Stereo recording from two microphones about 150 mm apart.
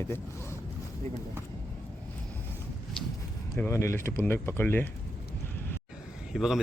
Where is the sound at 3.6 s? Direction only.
20° left (ahead or behind).